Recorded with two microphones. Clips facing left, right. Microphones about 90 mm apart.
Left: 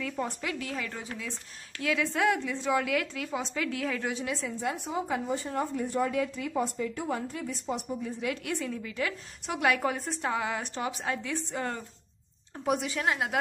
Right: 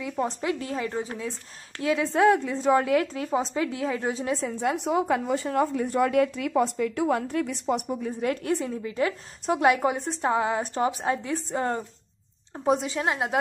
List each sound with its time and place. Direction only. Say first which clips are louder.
0.0 s a woman's voice: right 5 dB; 20° right (ahead or behind); by 4.6 s 40° right (ahead or behind)
4.6 s speech: right 9 dB; 70° right (ahead or behind)
8.2 s a woman's voice: right 9 dB; 45° right (ahead or behind)
8.5 s a woman's voice: right 6 dB; 30° right (ahead or behind)